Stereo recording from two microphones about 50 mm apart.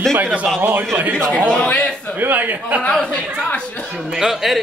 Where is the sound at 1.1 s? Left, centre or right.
Left.